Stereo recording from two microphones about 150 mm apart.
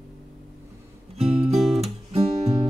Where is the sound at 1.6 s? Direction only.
Centre (ahead or behind).